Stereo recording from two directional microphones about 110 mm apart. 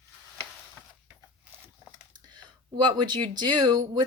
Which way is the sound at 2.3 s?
45° right (ahead or behind).